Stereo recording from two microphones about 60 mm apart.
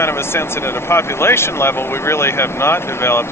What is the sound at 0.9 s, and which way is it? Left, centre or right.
Speech, left.